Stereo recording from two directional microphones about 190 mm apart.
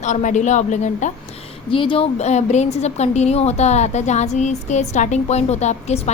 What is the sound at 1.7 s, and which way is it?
A woman's voice, 25° left (ahead or behind).